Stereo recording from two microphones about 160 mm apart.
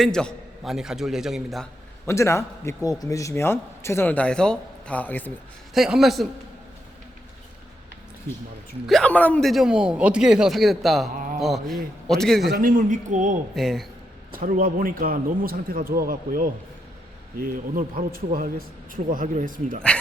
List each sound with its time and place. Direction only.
0.0 s a man's voice: 5° left (ahead or behind)
2.0 s a man's voice: 15° left (ahead or behind)
5.7 s a man's voice: centre (ahead or behind)
8.9 s a man's voice: 5° left (ahead or behind)
12.5 s speech: 65° right (ahead or behind)
13.6 s a man's voice: centre (ahead or behind)
14.3 s a man's voice: 60° right (ahead or behind)